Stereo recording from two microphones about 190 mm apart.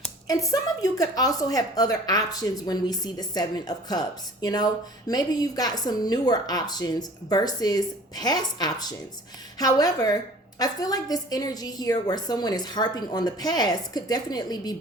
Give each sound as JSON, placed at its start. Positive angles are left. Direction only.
{"t": 0.3, "sound": "a woman's voice", "side_deg": 20}